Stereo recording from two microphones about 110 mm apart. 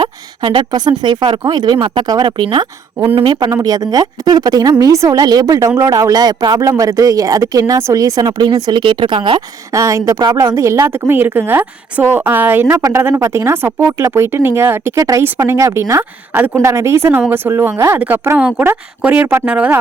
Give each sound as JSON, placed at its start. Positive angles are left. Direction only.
{"t": 0.0, "sound": "a woman's voice", "side_deg": -45}
{"t": 3.5, "sound": "a woman's voice", "side_deg": -35}
{"t": 9.7, "sound": "a woman's voice", "side_deg": -30}
{"t": 10.5, "sound": "a woman's voice", "side_deg": -25}
{"t": 12.7, "sound": "a woman's voice", "side_deg": -30}